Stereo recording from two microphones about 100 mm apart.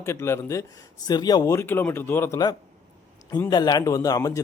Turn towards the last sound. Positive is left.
turn(degrees=35)  # may be behind; listen again after turning